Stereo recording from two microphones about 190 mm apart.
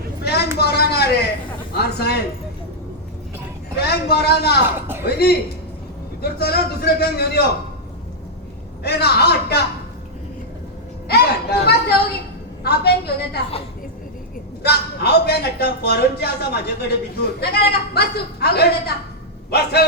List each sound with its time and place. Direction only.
0.2 s vehicle: 60° left (ahead or behind)
0.6 s a sound: 55° left (ahead or behind)
1.8 s speech: 55° left (ahead or behind)
3.8 s a man's voice: 55° left (ahead or behind)
8.8 s a man's voice: 55° left (ahead or behind)
11.1 s a sound: 55° left (ahead or behind)
12.6 s a man's voice: 60° left (ahead or behind)
14.6 s a man's voice: 55° left (ahead or behind)